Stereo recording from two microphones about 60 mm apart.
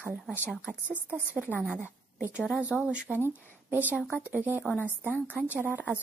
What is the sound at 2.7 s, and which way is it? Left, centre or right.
Speech, centre.